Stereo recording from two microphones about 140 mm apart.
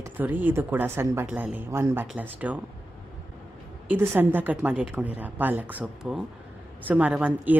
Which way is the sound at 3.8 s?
15° right (ahead or behind).